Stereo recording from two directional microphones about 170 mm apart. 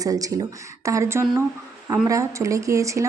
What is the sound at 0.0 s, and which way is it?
A woman's voice, 20° right (ahead or behind).